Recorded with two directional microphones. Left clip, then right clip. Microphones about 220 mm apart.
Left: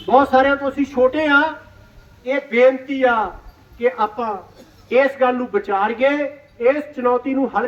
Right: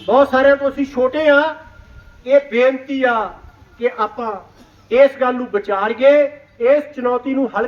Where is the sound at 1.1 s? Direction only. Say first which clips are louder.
Right 6 dB; 5° right (ahead or behind).